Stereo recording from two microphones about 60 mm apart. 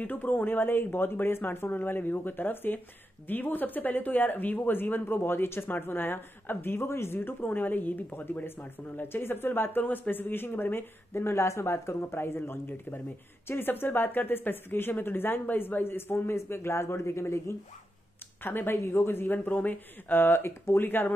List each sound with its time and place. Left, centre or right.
0.0 s speech: left